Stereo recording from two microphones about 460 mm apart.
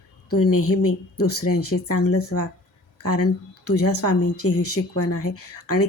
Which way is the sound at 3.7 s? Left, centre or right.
Left.